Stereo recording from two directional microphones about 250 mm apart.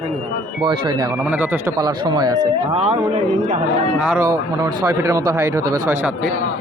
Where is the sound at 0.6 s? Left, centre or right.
Centre.